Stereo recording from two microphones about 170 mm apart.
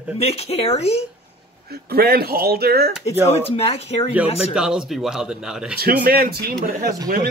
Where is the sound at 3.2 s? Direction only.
35° left (ahead or behind).